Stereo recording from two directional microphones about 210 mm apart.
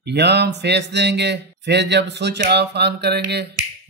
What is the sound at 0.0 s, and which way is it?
A man's voice, 50° right (ahead or behind).